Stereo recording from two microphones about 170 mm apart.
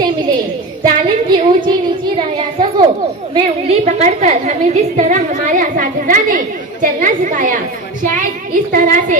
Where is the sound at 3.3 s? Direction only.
40° right (ahead or behind); by 9.2 s 55° right (ahead or behind).